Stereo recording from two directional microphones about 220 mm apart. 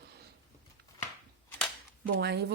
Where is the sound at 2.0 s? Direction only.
50° right (ahead or behind).